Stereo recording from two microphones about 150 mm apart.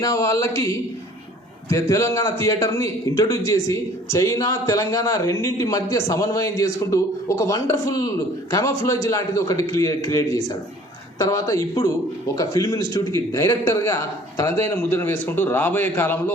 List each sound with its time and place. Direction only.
0.0 s a man's voice: 20° left (ahead or behind)